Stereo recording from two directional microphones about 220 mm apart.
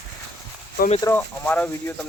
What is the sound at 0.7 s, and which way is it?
Speech, 30° left (ahead or behind).